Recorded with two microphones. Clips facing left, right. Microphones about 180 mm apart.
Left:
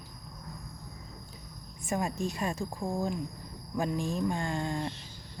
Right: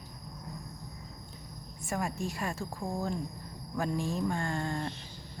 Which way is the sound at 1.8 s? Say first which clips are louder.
Left 3 dB; 20° left (ahead or behind).